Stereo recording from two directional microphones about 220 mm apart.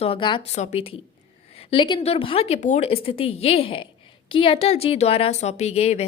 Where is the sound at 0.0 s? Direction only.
25° left (ahead or behind).